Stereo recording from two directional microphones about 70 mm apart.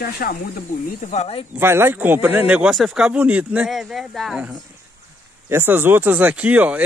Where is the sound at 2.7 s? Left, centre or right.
Centre.